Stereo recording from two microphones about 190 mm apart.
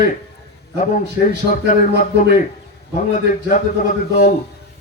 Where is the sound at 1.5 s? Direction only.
45° left (ahead or behind).